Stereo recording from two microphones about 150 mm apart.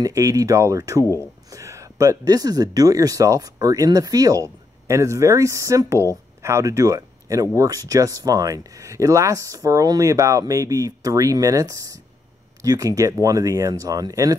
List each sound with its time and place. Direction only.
0.0 s speech: 20° right (ahead or behind)